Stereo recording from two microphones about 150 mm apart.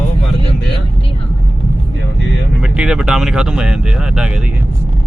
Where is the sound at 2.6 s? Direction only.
5° right (ahead or behind).